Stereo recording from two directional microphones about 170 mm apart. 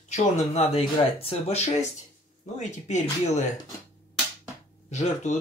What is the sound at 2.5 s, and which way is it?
Speech, 40° left (ahead or behind).